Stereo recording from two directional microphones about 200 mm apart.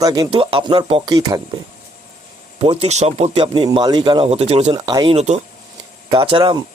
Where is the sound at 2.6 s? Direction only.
30° right (ahead or behind).